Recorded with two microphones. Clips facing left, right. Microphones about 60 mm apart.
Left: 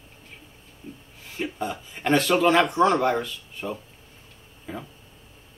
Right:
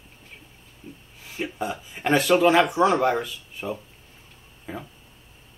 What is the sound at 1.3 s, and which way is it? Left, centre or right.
A man's voice, centre.